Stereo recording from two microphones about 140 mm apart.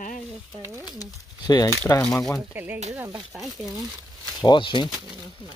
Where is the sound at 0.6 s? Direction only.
20° right (ahead or behind).